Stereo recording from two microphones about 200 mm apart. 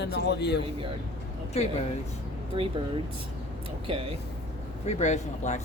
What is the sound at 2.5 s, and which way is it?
Speech, 25° right (ahead or behind).